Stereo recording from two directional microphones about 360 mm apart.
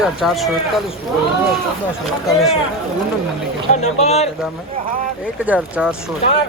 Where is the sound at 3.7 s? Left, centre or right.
Centre.